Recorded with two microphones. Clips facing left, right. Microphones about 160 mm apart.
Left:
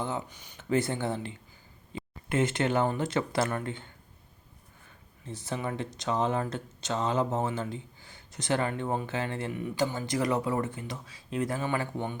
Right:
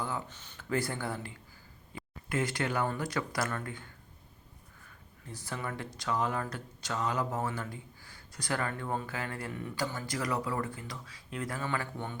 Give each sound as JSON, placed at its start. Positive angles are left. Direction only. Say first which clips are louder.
{"t": 0.0, "sound": "speech", "louder": "left 3 dB", "side_deg": 15}
{"t": 5.2, "sound": "speech", "louder": "left 5 dB", "side_deg": 20}